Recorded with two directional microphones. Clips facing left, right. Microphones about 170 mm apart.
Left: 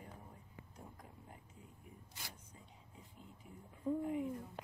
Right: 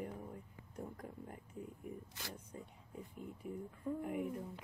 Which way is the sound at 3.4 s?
60° right (ahead or behind).